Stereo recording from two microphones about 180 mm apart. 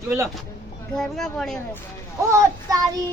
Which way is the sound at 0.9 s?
5° left (ahead or behind).